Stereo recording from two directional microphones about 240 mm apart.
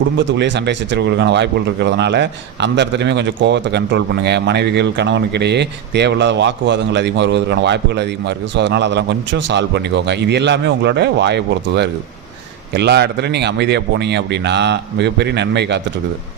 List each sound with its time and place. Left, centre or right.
0.2 s speech: right